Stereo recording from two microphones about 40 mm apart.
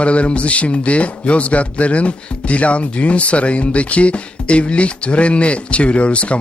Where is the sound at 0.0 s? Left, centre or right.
Left.